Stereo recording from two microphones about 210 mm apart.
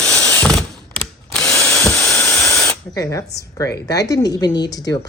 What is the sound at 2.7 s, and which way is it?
Spray, 15° left (ahead or behind).